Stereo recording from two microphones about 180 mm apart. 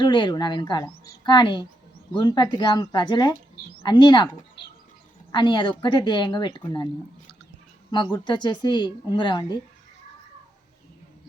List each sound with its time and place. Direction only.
0.0 s speech: 25° left (ahead or behind)
4.6 s a sound: 70° left (ahead or behind)
5.3 s speech: 25° left (ahead or behind)
7.9 s speech: 25° left (ahead or behind)